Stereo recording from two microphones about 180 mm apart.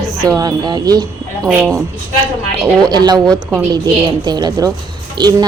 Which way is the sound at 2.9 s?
25° right (ahead or behind).